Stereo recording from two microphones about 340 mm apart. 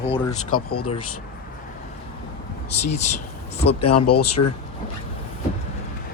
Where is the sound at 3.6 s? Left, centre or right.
Left.